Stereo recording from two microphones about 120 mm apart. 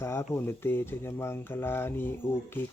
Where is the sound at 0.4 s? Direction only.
20° left (ahead or behind).